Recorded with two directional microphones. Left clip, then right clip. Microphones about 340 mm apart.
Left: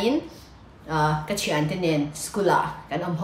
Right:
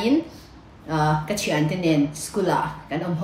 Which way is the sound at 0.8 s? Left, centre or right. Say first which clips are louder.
Right 1 dB; centre.